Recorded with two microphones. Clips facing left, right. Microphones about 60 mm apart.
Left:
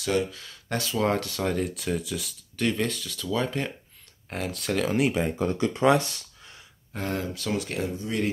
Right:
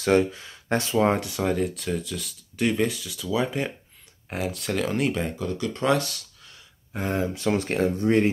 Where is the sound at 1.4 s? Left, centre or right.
Centre.